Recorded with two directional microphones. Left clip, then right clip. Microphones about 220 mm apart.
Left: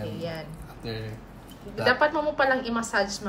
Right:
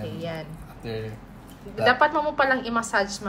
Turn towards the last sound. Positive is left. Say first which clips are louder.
# right 2 dB
turn(degrees=10)  # may be behind; listen again after turning